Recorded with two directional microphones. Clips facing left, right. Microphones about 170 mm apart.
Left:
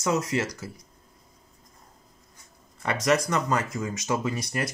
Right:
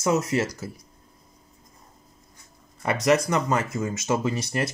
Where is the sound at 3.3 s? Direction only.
25° right (ahead or behind).